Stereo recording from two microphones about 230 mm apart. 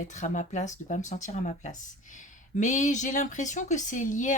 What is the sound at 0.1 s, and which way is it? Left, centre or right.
Speech, left.